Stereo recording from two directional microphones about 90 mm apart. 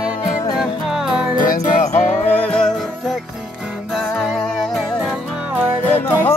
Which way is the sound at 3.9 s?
Centre (ahead or behind).